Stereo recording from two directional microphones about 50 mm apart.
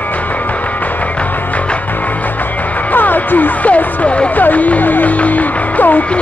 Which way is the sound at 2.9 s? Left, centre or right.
Left.